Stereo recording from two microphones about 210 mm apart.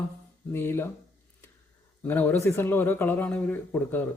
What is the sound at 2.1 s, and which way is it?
Speech, 10° left (ahead or behind).